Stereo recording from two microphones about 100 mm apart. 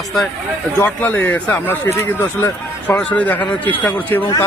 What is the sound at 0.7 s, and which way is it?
Speech, 15° left (ahead or behind).